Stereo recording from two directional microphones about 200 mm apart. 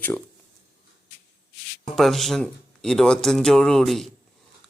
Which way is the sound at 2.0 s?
Centre (ahead or behind).